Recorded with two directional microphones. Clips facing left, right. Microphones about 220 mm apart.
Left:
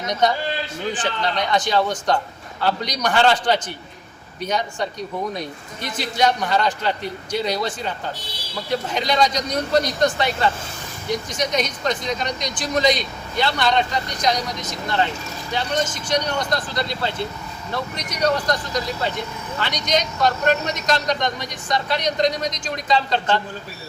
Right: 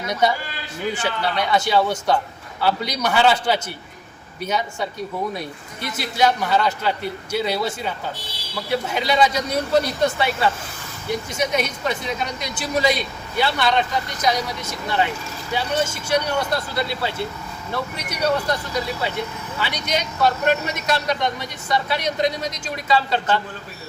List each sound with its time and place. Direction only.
0.1 s a man's voice: 5° right (ahead or behind)
6.0 s a man's voice: 5° right (ahead or behind)